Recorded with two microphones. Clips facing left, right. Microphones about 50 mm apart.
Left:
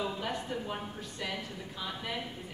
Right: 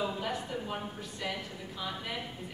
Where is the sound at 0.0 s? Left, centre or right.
Centre.